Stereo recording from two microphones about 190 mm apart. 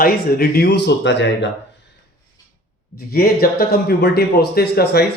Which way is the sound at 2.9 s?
55° left (ahead or behind).